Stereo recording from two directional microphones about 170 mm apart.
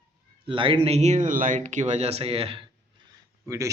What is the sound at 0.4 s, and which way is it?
Speech, 30° right (ahead or behind).